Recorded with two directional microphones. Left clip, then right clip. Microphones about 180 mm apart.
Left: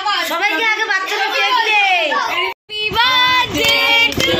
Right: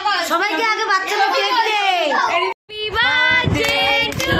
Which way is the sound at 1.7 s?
70° right (ahead or behind).